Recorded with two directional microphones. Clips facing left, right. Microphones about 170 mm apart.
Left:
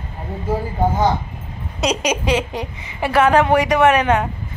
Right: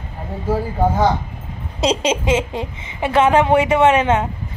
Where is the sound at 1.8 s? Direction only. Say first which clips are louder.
Right 2 dB; 30° right (ahead or behind).